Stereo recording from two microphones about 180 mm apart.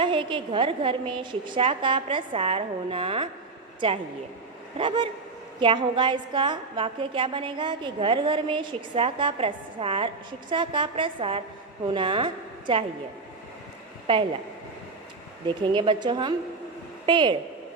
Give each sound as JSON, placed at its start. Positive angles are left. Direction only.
{"t": 0.0, "sound": "a woman's voice", "side_deg": -25}
{"t": 4.8, "sound": "a woman's voice", "side_deg": -25}
{"t": 15.4, "sound": "a woman's voice", "side_deg": -25}